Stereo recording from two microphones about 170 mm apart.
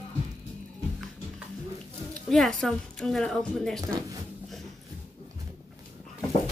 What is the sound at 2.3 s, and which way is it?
A woman's voice, centre (ahead or behind).